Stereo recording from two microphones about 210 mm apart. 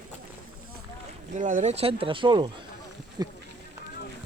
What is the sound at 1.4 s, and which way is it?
Speech, 40° right (ahead or behind).